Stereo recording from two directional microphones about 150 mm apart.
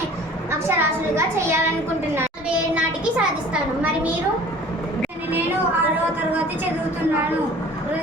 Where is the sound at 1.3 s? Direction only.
15° right (ahead or behind).